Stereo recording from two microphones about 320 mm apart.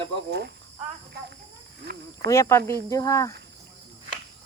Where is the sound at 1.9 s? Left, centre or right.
Right.